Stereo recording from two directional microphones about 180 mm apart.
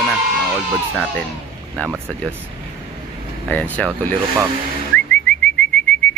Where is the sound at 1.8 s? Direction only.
10° left (ahead or behind).